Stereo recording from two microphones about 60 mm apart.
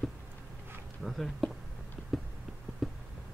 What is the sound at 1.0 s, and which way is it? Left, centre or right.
Speech, centre.